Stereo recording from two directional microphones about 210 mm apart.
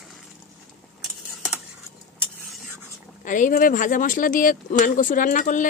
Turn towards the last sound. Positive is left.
turn(degrees=35)  # may be behind; listen again after turning